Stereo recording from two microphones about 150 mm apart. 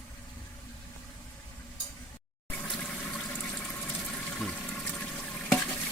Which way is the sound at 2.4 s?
10° left (ahead or behind).